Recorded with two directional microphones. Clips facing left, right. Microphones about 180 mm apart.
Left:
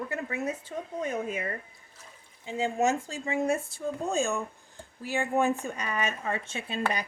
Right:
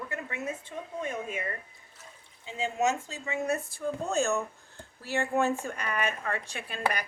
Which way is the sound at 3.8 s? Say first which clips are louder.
Even; 15° left (ahead or behind).